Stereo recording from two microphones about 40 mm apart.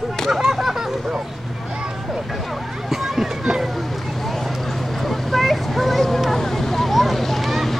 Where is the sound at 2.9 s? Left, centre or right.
Centre.